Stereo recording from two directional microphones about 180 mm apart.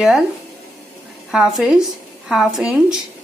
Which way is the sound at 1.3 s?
5° right (ahead or behind).